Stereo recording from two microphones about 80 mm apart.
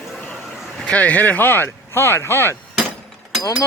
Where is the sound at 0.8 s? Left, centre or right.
Centre.